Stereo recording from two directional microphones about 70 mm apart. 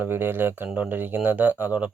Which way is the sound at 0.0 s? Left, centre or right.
Right.